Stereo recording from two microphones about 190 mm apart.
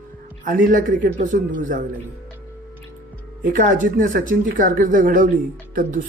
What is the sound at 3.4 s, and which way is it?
Speech, 45° right (ahead or behind).